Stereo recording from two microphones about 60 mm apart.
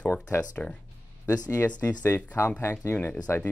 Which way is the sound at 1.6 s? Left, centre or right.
Left.